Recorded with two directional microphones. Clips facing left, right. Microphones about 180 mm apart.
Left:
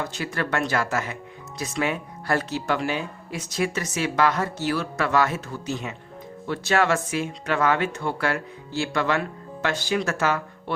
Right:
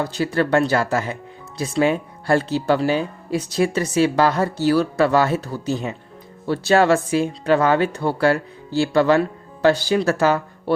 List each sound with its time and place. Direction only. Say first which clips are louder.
0.0 s speech: right 8 dB; 35° right (ahead or behind)